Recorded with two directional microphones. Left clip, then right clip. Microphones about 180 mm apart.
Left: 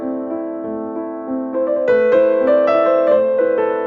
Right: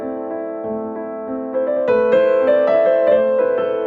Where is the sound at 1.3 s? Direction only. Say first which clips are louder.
Left 1 dB; centre (ahead or behind).